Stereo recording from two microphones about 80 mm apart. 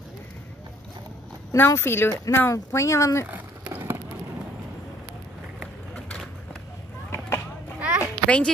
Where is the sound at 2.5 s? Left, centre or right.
Left.